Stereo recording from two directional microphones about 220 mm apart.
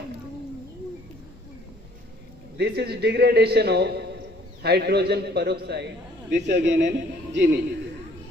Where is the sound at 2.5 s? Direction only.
50° right (ahead or behind).